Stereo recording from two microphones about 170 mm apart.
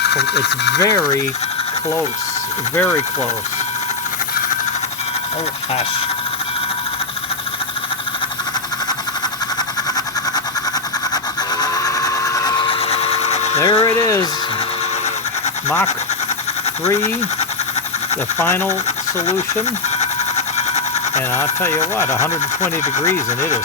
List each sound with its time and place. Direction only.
0.1 s speech: 80° left
0.8 s speech: 20° left (ahead or behind)
11.6 s tools: 20° left (ahead or behind); by 13.6 s 40° left (ahead or behind)
13.6 s speech: 25° left (ahead or behind)
18.3 s speech: 15° left (ahead or behind)
20.0 s a sound: 40° left (ahead or behind)
22.2 s speech: 45° left (ahead or behind)